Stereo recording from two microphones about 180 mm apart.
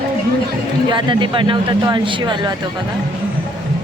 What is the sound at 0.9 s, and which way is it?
Speech, 25° right (ahead or behind).